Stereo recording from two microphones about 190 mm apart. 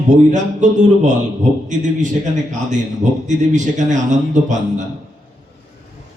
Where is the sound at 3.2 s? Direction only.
40° right (ahead or behind).